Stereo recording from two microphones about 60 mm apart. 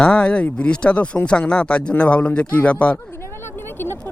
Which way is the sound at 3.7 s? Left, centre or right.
Left.